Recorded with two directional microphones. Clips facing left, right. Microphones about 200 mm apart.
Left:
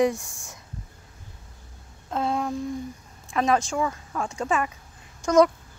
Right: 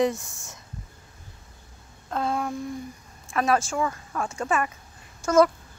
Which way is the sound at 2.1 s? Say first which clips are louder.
Left 1 dB; 20° left (ahead or behind).